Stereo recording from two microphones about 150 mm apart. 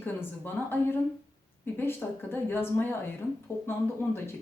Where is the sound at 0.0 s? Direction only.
15° left (ahead or behind).